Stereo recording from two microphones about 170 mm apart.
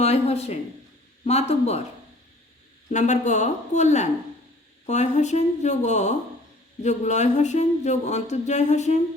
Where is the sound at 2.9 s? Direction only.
45° left (ahead or behind).